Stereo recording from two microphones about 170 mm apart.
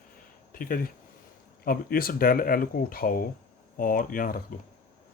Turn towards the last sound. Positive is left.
turn(degrees=55)  # may be behind; listen again after turning